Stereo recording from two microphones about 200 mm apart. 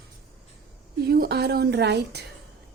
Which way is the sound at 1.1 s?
55° right (ahead or behind).